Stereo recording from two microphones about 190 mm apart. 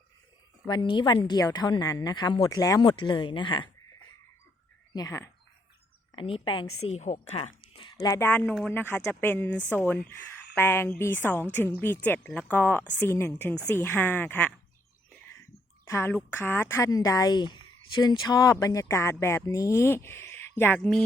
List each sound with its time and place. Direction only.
0.7 s a woman's voice: 25° left (ahead or behind)
4.9 s speech: 15° left (ahead or behind)
6.1 s a woman's voice: 30° left (ahead or behind)
8.0 s speech: 15° left (ahead or behind)
15.9 s speech: 10° left (ahead or behind)